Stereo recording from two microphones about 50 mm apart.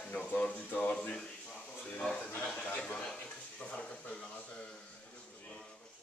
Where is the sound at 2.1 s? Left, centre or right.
Left.